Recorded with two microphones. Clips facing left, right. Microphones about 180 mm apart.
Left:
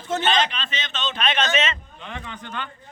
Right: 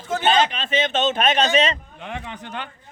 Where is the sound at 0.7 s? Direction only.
50° right (ahead or behind); by 1.7 s 35° right (ahead or behind).